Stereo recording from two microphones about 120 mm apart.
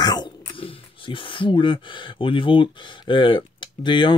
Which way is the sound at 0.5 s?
50° left (ahead or behind).